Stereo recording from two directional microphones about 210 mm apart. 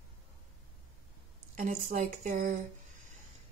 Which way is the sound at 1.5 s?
40° right (ahead or behind).